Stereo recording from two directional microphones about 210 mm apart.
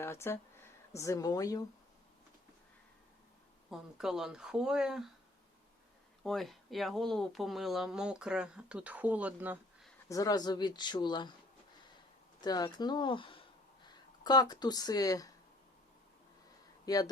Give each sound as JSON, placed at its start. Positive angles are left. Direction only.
{"t": 0.0, "sound": "speech", "side_deg": 10}
{"t": 3.7, "sound": "speech", "side_deg": 0}
{"t": 6.2, "sound": "speech", "side_deg": 0}
{"t": 10.1, "sound": "speech", "side_deg": 15}
{"t": 12.4, "sound": "speech", "side_deg": 20}
{"t": 16.8, "sound": "speech", "side_deg": 20}